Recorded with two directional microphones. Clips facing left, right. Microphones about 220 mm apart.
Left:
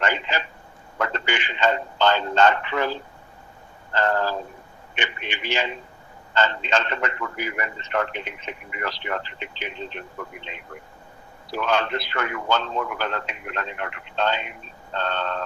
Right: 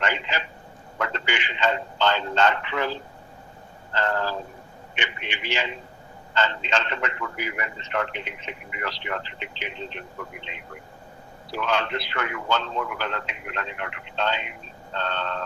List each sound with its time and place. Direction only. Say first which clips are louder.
0.0 s a sound: left 2 dB; 45° left (ahead or behind)
3.9 s a man's voice: left 3 dB; 45° left (ahead or behind)
11.5 s a man's voice: left 2 dB; 45° left (ahead or behind)